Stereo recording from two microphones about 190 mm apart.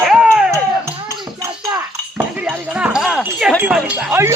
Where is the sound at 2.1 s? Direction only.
5° right (ahead or behind).